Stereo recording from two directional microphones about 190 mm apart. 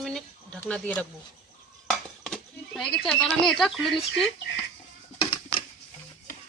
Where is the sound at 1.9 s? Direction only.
5° left (ahead or behind).